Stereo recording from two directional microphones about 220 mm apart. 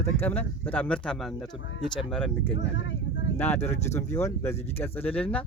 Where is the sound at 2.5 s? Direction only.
60° left (ahead or behind).